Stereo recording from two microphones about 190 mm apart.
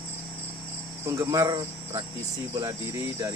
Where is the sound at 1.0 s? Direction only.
15° right (ahead or behind).